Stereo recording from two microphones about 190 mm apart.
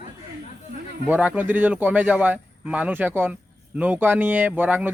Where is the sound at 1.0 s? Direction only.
10° right (ahead or behind).